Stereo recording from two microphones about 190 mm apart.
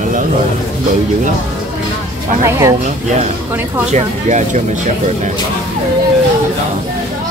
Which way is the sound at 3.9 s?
40° right (ahead or behind).